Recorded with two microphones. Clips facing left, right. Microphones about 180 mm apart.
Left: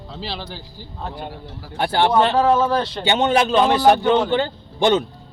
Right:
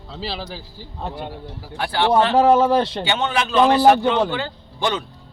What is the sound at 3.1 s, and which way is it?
Speech, 40° left (ahead or behind).